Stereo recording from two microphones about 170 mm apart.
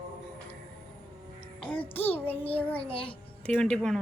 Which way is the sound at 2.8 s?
30° left (ahead or behind).